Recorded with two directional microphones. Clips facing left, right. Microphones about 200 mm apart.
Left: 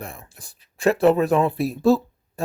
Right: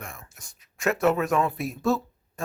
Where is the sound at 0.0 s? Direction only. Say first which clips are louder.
Left 5 dB; 35° left (ahead or behind).